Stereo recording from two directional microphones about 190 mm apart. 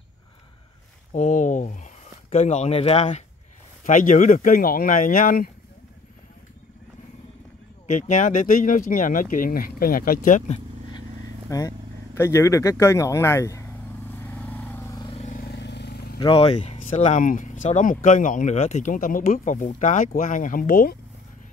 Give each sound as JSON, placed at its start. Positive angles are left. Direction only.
{"t": 1.1, "sound": "speech", "side_deg": 40}
{"t": 7.8, "sound": "speech", "side_deg": 40}
{"t": 11.4, "sound": "vehicle", "side_deg": 15}
{"t": 15.0, "sound": "vehicle", "side_deg": 30}
{"t": 15.3, "sound": "vehicle", "side_deg": 55}
{"t": 16.2, "sound": "speech", "side_deg": 30}